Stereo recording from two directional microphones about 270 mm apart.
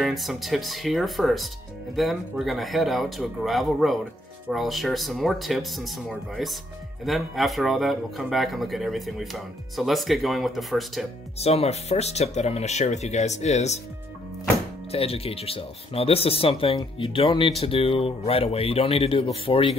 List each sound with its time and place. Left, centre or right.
0.0 s speech: centre
11.3 s speech: left
14.9 s speech: left